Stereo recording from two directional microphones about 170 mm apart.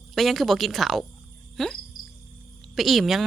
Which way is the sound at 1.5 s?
5° left (ahead or behind).